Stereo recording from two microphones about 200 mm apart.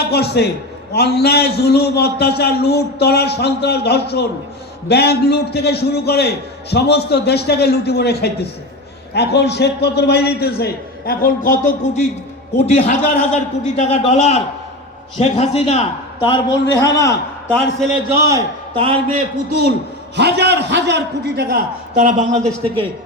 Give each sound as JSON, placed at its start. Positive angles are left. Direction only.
{"t": 0.0, "sound": "a man's voice", "side_deg": 55}
{"t": 17.5, "sound": "a man's voice", "side_deg": 0}
{"t": 18.3, "sound": "a man's voice", "side_deg": -15}
{"t": 19.5, "sound": "a man's voice", "side_deg": -55}
{"t": 21.9, "sound": "speech", "side_deg": -35}